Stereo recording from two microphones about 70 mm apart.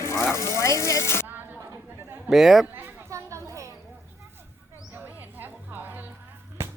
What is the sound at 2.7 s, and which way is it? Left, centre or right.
Children playing, right.